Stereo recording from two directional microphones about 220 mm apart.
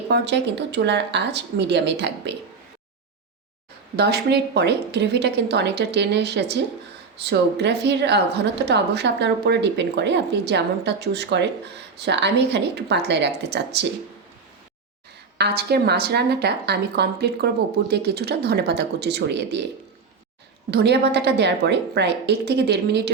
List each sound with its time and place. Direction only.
0.1 s a woman's voice: 50° right (ahead or behind)
3.9 s a woman's voice: 45° right (ahead or behind)
15.4 s a woman's voice: 45° right (ahead or behind)
20.7 s a woman's voice: 50° right (ahead or behind)